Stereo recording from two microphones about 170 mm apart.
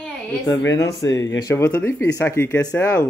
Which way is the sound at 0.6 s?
15° left (ahead or behind).